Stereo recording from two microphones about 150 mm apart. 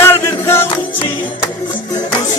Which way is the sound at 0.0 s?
15° left (ahead or behind).